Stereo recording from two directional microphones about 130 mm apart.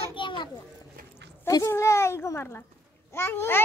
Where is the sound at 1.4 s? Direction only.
20° left (ahead or behind).